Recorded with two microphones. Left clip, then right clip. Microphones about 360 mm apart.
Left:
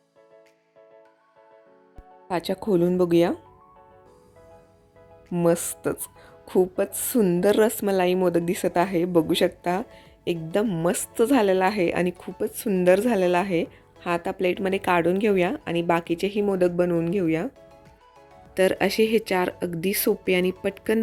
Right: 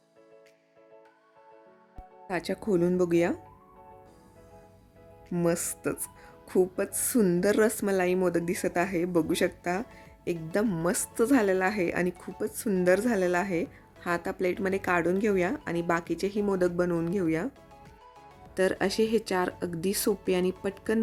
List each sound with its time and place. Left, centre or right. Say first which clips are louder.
2.2 s a woman's voice: left 5 dB; centre
5.3 s a woman's voice: left 6 dB; centre
18.5 s a woman's voice: left 5 dB; centre